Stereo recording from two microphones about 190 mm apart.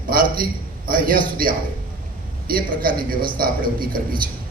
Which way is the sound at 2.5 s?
50° right (ahead or behind).